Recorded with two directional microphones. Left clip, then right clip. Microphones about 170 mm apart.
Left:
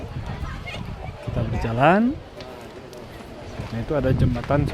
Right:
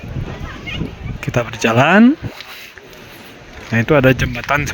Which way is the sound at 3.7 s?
25° right (ahead or behind).